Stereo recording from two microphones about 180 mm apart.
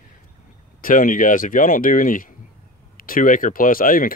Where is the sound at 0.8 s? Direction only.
50° left (ahead or behind).